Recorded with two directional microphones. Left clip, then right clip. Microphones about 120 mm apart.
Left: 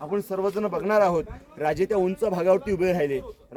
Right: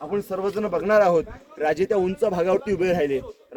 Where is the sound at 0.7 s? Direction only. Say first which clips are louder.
Right 4 dB; 45° left (ahead or behind).